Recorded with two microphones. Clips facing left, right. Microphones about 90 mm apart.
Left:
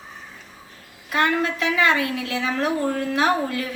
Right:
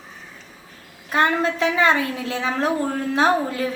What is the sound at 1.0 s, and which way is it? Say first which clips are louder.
A woman's voice: right 2 dB; 30° right (ahead or behind).